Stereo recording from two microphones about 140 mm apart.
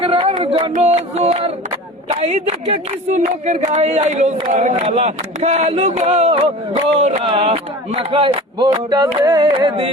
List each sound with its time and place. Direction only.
0.0 s speech: 45° right (ahead or behind)